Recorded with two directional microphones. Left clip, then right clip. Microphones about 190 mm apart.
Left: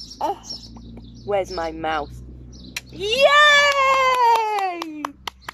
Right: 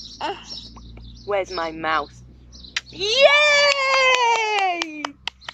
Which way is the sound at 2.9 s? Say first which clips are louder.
Even; 5° left (ahead or behind).